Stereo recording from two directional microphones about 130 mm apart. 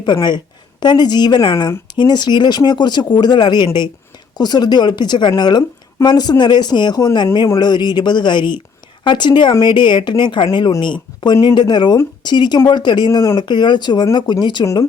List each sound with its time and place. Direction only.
0.0 s a woman's voice: 35° left (ahead or behind)